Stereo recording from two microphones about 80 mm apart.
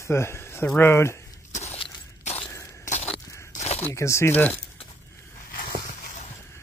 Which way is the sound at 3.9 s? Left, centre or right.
Left.